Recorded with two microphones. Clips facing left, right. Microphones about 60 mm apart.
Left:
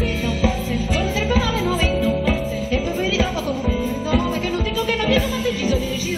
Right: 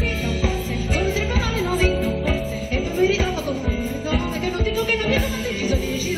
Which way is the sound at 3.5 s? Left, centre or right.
Left.